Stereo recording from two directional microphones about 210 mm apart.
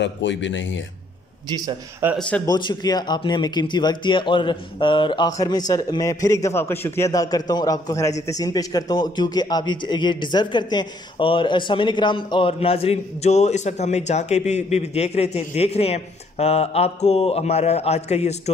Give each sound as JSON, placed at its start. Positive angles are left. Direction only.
{"t": 0.0, "sound": "speech", "side_deg": 60}
{"t": 1.5, "sound": "a man's voice", "side_deg": -20}
{"t": 2.1, "sound": "speech", "side_deg": 5}
{"t": 2.4, "sound": "a man's voice", "side_deg": 20}